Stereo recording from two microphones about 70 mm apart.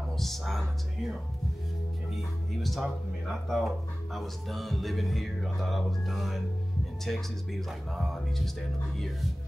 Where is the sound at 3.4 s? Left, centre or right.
Centre.